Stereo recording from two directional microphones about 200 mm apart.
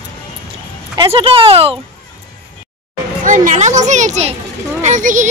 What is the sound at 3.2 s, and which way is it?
Speech, 40° right (ahead or behind).